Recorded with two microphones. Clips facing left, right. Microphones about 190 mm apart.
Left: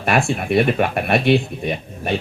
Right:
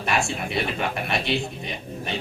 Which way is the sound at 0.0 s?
55° left (ahead or behind).